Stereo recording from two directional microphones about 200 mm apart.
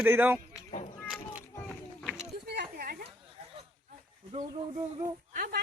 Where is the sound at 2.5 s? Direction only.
50° right (ahead or behind).